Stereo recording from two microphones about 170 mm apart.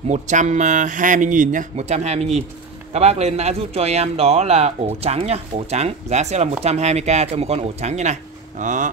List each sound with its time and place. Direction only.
0.1 s speech: 45° right (ahead or behind)